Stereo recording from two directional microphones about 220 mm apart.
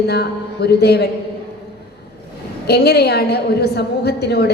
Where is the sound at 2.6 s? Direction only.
45° left (ahead or behind).